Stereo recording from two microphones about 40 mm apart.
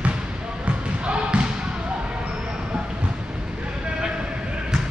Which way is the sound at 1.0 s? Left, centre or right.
Right.